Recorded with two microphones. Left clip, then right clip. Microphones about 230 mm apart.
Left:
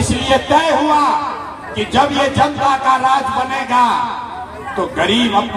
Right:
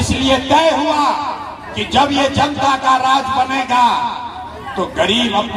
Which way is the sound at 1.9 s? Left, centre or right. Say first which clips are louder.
Even; right.